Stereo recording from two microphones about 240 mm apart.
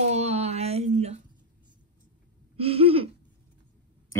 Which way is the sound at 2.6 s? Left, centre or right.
Right.